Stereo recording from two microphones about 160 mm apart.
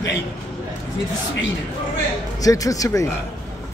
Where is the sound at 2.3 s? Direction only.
20° left (ahead or behind).